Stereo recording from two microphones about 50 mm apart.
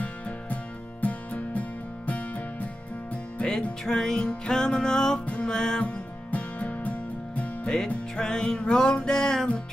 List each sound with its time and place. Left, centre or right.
1.0 s music: left
3.8 s music: centre
5.2 s music: left
5.5 s music: centre
5.9 s music: left
7.6 s music: centre